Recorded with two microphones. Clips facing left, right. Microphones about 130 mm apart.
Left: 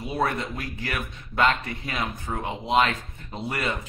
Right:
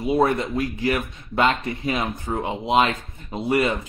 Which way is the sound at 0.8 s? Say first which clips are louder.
Right 9 dB; 20° right (ahead or behind).